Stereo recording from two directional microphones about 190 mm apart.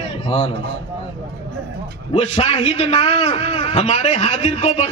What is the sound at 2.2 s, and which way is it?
A man's voice, 35° left (ahead or behind).